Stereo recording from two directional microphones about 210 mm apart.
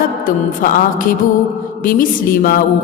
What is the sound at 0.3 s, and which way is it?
A woman's voice, 40° left (ahead or behind).